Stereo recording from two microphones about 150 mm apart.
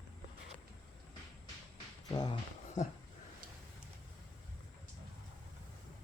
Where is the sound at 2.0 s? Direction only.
25° left (ahead or behind).